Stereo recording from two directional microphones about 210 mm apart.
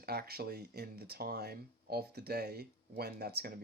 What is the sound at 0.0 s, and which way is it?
Speech, 50° right (ahead or behind).